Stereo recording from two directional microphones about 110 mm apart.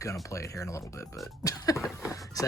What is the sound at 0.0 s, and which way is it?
Speech, 30° left (ahead or behind).